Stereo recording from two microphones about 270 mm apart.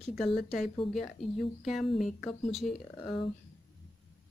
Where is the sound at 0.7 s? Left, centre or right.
Left.